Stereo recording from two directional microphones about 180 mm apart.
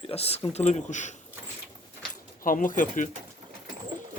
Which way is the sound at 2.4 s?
50° left (ahead or behind).